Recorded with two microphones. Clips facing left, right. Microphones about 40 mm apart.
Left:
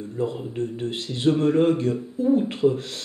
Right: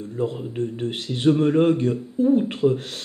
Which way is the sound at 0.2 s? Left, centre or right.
Centre.